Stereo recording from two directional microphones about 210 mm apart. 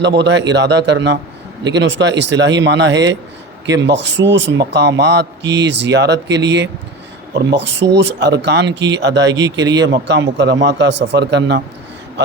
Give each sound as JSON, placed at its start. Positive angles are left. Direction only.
{"t": 0.2, "sound": "a man's voice", "side_deg": -55}
{"t": 9.4, "sound": "speech", "side_deg": -15}
{"t": 9.7, "sound": "a man's voice", "side_deg": -55}